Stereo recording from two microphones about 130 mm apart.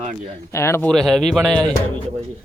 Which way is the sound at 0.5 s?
20° left (ahead or behind).